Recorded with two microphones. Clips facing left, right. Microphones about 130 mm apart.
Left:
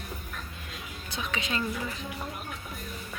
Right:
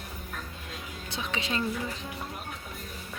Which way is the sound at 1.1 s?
30° right (ahead or behind).